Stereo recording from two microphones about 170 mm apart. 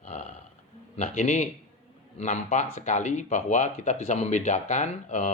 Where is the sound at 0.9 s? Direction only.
45° left (ahead or behind).